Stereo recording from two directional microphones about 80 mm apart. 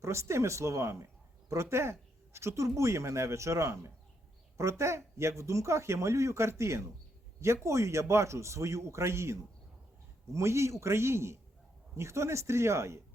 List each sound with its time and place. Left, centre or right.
0.0 s speech: right